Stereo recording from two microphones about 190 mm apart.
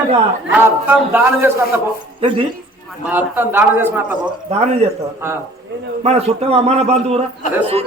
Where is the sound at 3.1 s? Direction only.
10° right (ahead or behind).